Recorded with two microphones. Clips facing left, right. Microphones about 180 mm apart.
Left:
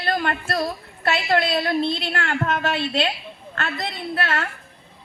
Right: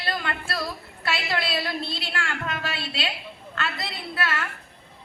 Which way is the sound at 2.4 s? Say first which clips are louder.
Left 8 dB; 50° left (ahead or behind).